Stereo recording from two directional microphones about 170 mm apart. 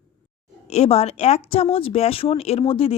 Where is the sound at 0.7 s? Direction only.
40° left (ahead or behind).